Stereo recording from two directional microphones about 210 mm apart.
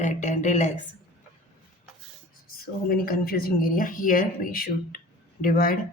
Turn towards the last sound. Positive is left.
turn(degrees=45)  # may be behind; listen again after turning